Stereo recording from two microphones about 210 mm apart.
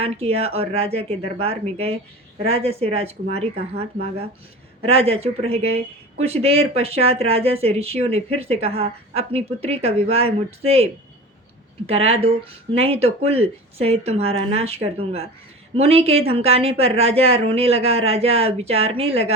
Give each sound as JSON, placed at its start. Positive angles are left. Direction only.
{"t": 0.0, "sound": "speech", "side_deg": -30}
{"t": 4.9, "sound": "speech", "side_deg": -30}
{"t": 11.9, "sound": "speech", "side_deg": -25}